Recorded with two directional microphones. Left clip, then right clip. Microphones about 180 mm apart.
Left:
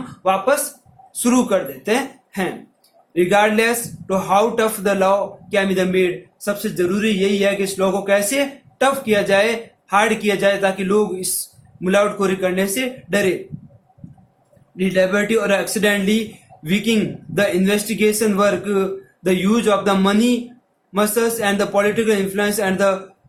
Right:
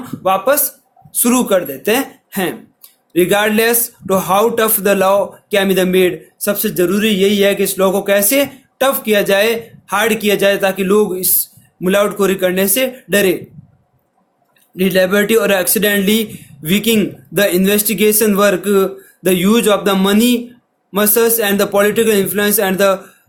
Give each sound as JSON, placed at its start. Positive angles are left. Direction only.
{"t": 0.2, "sound": "speech", "side_deg": -45}
{"t": 14.8, "sound": "speech", "side_deg": -50}